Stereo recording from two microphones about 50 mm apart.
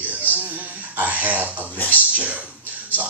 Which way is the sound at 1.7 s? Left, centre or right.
Left.